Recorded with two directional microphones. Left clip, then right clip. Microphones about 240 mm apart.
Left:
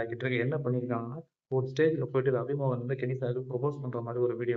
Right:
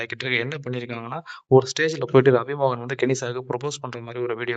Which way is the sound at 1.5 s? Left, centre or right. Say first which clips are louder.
Right 9 dB; right.